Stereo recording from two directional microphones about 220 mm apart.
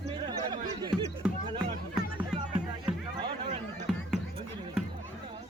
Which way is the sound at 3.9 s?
Centre (ahead or behind).